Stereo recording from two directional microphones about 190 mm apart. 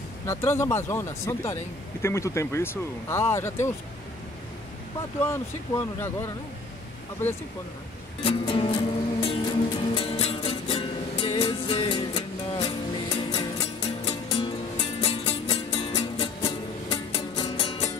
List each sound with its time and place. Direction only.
0.3 s speech: 15° left (ahead or behind)
5.2 s speech: 10° left (ahead or behind)
8.2 s music: 30° left (ahead or behind)